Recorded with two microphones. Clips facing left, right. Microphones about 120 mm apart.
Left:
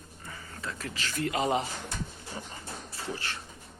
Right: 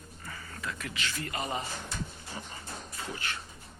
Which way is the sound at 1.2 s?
85° left.